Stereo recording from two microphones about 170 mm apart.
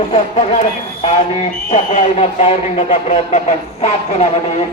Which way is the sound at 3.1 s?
45° left (ahead or behind).